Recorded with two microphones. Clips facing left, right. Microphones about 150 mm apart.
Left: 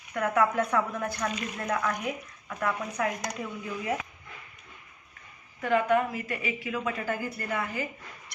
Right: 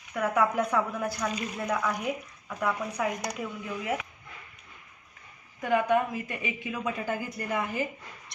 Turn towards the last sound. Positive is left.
turn(degrees=-20)  # may be behind; listen again after turning